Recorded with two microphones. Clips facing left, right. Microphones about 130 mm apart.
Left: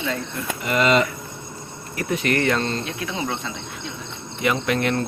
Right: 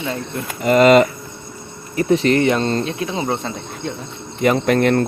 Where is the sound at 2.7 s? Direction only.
35° right (ahead or behind).